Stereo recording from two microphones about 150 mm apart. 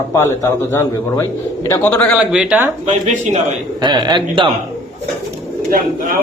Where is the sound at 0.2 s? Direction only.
15° left (ahead or behind).